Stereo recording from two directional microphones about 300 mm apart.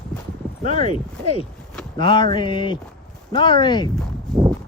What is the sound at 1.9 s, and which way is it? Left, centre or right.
Speech, centre.